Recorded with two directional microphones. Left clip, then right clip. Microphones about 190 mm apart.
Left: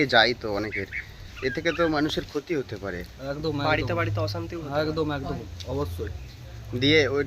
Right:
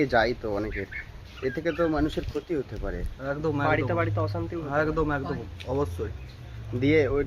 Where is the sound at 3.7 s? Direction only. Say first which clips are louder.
Left 2 dB; 20° right (ahead or behind).